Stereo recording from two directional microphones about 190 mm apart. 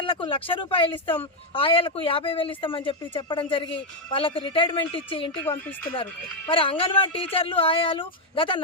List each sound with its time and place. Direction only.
0.0 s speech: 25° left (ahead or behind)
6.5 s speech: 30° left (ahead or behind)